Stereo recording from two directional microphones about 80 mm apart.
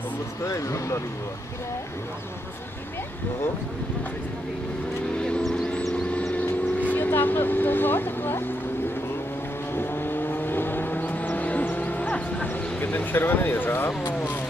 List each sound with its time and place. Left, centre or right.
0.5 s speech: left
5.1 s a sound: centre
6.3 s vehicle: left
9.8 s vehicle: left